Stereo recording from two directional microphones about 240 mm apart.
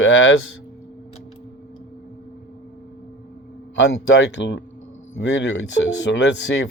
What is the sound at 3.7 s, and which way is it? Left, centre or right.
Speech, left.